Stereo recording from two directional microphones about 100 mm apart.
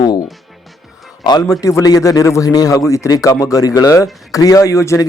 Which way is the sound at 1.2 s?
40° left (ahead or behind).